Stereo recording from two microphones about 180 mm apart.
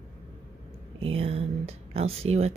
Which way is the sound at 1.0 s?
35° right (ahead or behind).